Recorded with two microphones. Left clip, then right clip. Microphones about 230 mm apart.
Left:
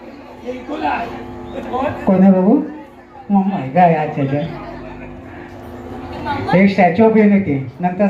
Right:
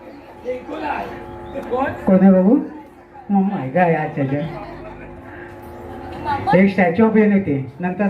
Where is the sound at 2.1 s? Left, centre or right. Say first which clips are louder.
Even; right.